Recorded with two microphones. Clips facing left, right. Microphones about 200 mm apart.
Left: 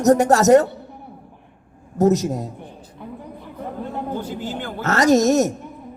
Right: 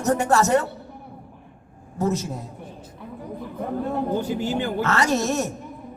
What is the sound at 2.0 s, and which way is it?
Speech, 40° left (ahead or behind).